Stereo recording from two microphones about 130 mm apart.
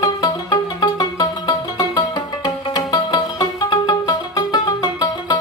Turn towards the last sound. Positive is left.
turn(degrees=30)  # may be behind; listen again after turning